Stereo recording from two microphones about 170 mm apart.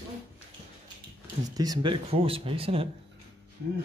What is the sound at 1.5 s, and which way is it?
Speech, 25° right (ahead or behind).